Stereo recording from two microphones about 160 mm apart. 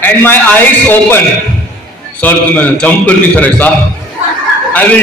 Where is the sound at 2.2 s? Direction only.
10° left (ahead or behind).